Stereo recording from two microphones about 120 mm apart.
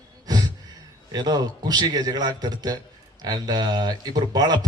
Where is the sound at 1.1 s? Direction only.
35° right (ahead or behind).